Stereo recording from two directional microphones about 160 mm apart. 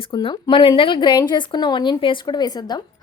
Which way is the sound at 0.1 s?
30° left (ahead or behind).